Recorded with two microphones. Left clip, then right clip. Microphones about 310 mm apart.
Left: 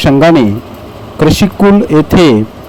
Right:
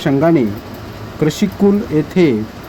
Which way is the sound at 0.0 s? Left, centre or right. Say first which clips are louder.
Left 7 dB; left.